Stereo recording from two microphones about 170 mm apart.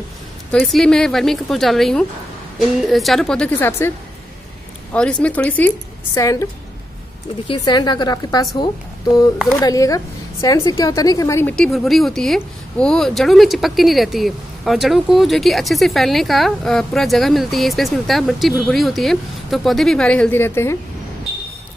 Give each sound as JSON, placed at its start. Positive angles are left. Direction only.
{"t": 0.5, "sound": "a woman's voice", "side_deg": 5}
{"t": 4.9, "sound": "speech", "side_deg": 5}
{"t": 6.1, "sound": "a woman's voice", "side_deg": 20}
{"t": 7.4, "sound": "a woman's voice", "side_deg": 25}
{"t": 9.5, "sound": "a woman's voice", "side_deg": 20}
{"t": 11.5, "sound": "a woman's voice", "side_deg": 0}